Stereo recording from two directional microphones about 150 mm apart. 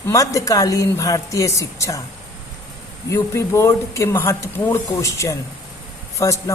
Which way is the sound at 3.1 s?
20° left (ahead or behind).